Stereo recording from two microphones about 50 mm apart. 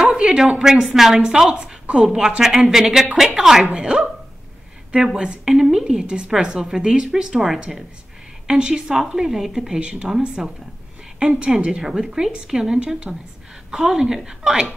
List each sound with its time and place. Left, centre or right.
0.0 s a woman's voice: centre
3.6 s speech: centre
9.8 s speech: right